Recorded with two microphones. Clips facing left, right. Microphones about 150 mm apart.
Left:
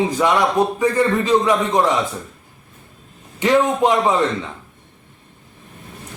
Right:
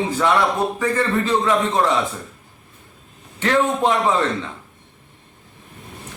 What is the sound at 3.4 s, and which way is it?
Speech, 15° left (ahead or behind).